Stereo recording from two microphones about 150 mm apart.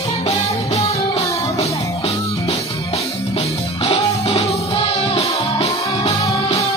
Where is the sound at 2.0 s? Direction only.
45° left (ahead or behind).